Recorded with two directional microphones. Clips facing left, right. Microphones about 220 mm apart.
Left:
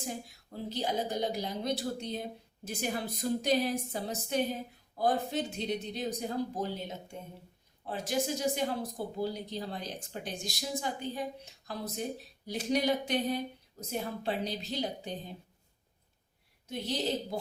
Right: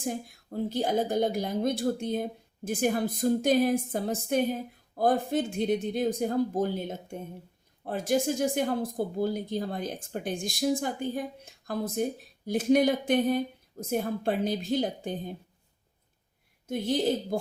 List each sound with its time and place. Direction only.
0.5 s speech: 50° right (ahead or behind)
16.6 s speech: 50° right (ahead or behind)